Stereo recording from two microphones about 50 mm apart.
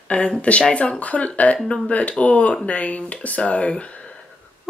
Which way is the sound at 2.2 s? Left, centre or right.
Left.